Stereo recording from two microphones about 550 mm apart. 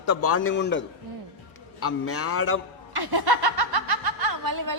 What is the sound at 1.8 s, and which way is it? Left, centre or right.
Speech, left.